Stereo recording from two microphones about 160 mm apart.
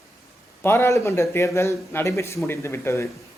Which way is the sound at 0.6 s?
15° left (ahead or behind).